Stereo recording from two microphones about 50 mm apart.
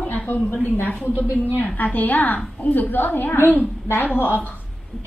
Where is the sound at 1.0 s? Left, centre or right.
Right.